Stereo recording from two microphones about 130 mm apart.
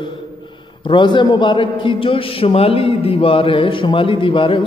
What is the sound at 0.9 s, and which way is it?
A man's voice, 35° left (ahead or behind).